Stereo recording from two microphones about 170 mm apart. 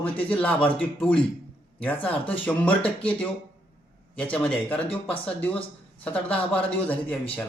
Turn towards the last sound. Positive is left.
turn(degrees=10)  # may be behind; listen again after turning